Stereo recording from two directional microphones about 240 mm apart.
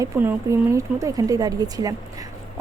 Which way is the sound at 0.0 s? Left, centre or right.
Centre.